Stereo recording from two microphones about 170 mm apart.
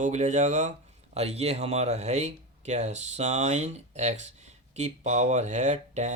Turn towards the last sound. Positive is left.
turn(degrees=-40)  # may be behind; listen again after turning